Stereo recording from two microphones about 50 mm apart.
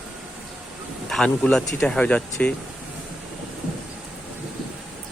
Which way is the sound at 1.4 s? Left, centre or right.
Left.